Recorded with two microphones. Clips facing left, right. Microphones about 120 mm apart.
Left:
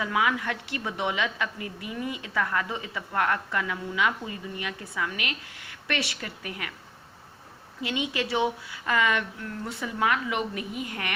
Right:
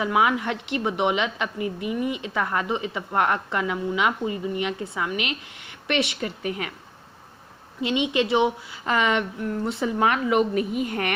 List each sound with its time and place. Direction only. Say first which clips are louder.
0.0 s a woman's voice: right 5 dB; 20° right (ahead or behind)
7.8 s a woman's voice: right 7 dB; 20° right (ahead or behind)